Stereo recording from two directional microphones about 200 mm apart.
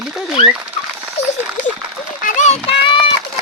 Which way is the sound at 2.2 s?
40° left (ahead or behind).